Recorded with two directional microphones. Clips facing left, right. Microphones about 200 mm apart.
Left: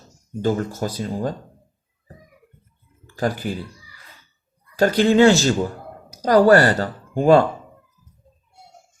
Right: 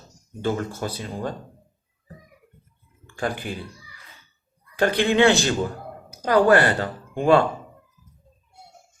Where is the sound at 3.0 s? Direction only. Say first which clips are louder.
Left 4 dB; 35° left (ahead or behind).